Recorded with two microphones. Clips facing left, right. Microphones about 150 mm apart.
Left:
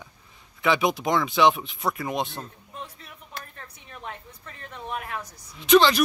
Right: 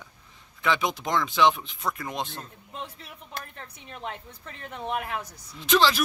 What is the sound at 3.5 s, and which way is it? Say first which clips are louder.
Speech: right 2 dB; 20° right (ahead or behind).